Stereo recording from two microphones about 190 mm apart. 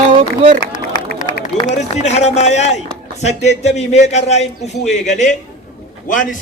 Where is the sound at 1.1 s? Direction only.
40° left (ahead or behind).